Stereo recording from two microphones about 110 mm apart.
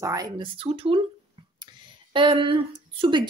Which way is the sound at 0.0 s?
30° right (ahead or behind).